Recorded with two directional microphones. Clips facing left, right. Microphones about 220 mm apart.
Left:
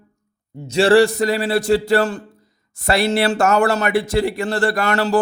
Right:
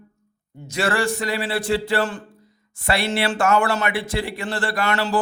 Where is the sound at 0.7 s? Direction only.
30° left (ahead or behind).